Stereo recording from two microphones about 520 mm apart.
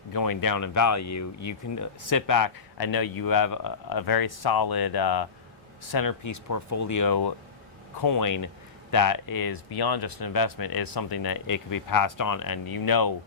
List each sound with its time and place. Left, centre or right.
0.1 s speech: left